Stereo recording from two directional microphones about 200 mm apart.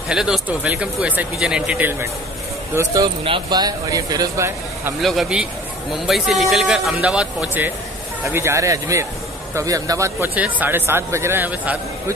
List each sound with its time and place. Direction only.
0.1 s speech: 5° right (ahead or behind)
5.0 s speech: centre (ahead or behind)